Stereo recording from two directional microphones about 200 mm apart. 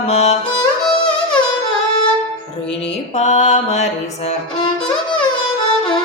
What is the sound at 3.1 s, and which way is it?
Music, 35° left (ahead or behind).